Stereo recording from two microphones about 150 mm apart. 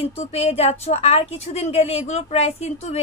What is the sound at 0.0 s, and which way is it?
A woman's voice, 40° left (ahead or behind).